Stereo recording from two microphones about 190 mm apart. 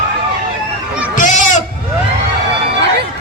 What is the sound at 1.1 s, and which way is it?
Sheep, 40° left (ahead or behind).